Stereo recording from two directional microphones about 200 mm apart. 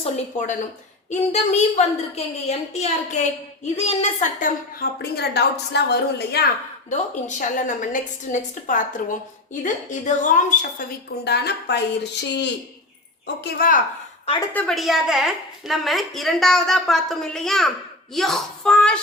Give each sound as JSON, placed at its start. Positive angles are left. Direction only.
{"t": 0.0, "sound": "a woman's voice", "side_deg": 40}
{"t": 6.9, "sound": "a woman's voice", "side_deg": 40}
{"t": 13.2, "sound": "speech", "side_deg": 50}
{"t": 14.5, "sound": "a woman's voice", "side_deg": 0}